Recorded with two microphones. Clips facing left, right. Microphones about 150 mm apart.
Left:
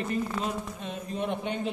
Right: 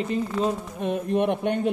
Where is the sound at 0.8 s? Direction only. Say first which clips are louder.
Right 10 dB; 55° right (ahead or behind).